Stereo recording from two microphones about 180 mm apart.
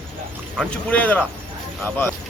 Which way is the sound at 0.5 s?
10° left (ahead or behind).